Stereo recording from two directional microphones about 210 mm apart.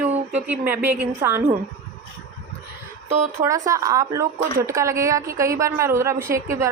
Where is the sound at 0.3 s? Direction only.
5° right (ahead or behind).